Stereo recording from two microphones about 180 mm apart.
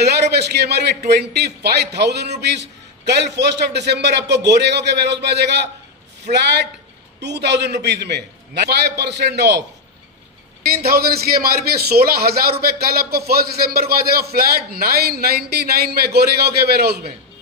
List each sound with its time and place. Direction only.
0.0 s a man's voice: 65° right (ahead or behind)
10.6 s a man's voice: 55° right (ahead or behind)